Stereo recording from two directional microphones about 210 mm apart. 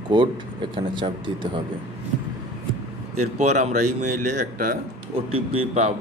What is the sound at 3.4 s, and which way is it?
Speech, 35° right (ahead or behind).